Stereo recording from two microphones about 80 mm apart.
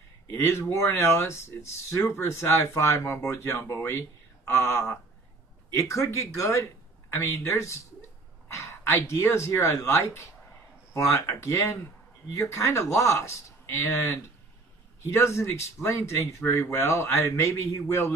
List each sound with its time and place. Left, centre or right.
0.3 s speech: left